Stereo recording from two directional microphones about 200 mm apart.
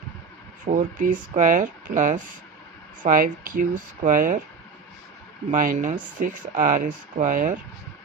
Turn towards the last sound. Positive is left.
turn(degrees=-40)  # may be behind; listen again after turning